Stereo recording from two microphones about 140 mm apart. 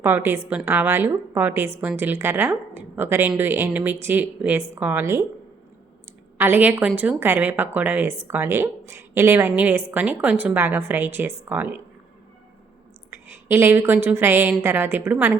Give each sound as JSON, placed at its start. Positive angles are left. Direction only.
{"t": 0.0, "sound": "a woman's voice", "side_deg": -15}
{"t": 6.3, "sound": "a woman's voice", "side_deg": -15}
{"t": 13.1, "sound": "a woman's voice", "side_deg": -15}